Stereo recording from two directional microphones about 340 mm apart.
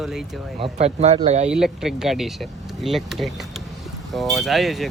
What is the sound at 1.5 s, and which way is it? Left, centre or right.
Speech, centre.